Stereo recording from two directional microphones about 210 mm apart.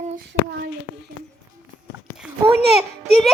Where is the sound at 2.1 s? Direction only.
5° right (ahead or behind).